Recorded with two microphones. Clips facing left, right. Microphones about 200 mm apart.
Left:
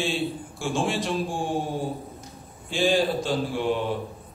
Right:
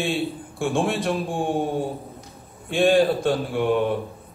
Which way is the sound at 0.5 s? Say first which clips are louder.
Right 4 dB; 60° right (ahead or behind).